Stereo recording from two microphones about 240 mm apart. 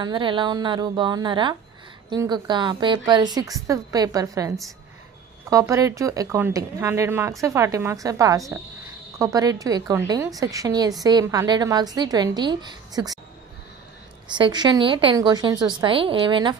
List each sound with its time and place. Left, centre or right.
0.0 s a woman's voice: centre
14.3 s a woman's voice: centre